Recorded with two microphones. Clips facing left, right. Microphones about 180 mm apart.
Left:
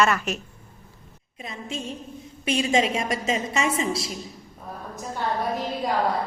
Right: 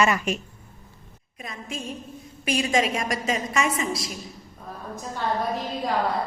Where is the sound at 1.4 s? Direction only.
25° left (ahead or behind).